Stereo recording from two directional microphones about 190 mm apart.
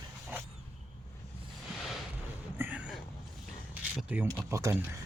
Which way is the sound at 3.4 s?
Centre (ahead or behind).